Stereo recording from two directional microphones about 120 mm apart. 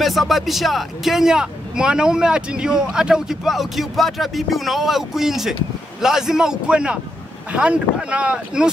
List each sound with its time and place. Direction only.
0.0 s speech: centre (ahead or behind)